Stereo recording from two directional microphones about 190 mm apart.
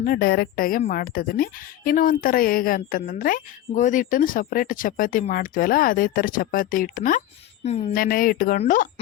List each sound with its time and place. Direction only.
0.0 s a woman's voice: 50° left (ahead or behind)
7.6 s speech: 35° left (ahead or behind)
7.9 s a woman's voice: 50° left (ahead or behind)